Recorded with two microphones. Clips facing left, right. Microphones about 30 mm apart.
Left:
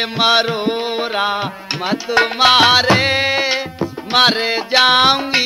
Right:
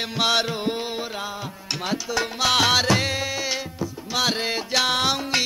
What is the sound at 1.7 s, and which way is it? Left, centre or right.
Tabla, left.